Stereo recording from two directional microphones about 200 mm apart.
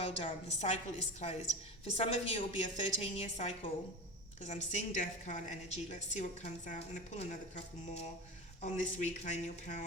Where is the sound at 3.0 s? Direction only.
30° left (ahead or behind).